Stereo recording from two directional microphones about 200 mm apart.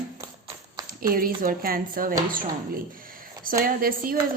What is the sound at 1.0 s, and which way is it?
A woman's voice, 45° right (ahead or behind).